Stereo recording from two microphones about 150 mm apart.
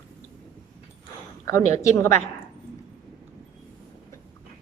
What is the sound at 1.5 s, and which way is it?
Speech, 20° left (ahead or behind).